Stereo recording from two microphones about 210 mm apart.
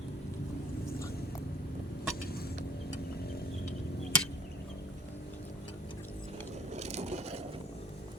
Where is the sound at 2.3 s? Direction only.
45° left (ahead or behind).